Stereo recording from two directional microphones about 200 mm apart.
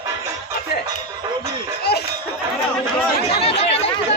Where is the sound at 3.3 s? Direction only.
30° left (ahead or behind).